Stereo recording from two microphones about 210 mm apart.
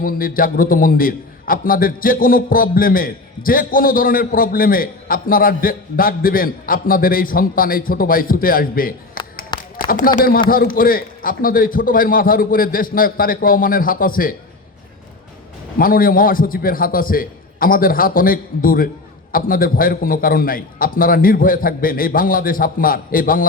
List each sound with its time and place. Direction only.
0.0 s a man's voice: 40° left (ahead or behind)
9.7 s a sound: 40° left (ahead or behind)
10.2 s a man's voice: 40° left (ahead or behind)
15.8 s a man's voice: 45° left (ahead or behind)